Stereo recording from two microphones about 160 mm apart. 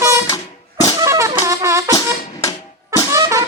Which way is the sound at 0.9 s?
20° right (ahead or behind).